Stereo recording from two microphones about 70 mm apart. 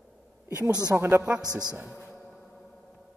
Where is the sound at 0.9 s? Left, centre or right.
Centre.